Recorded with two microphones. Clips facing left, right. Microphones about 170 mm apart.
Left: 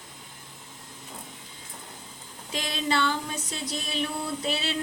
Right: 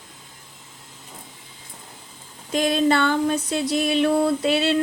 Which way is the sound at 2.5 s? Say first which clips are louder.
Right 9 dB; 50° right (ahead or behind).